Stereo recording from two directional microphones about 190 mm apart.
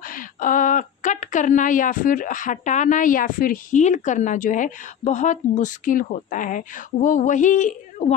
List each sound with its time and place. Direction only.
0.0 s a woman's voice: 45° left (ahead or behind)